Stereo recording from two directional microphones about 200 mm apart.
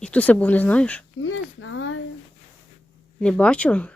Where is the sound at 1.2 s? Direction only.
85° left.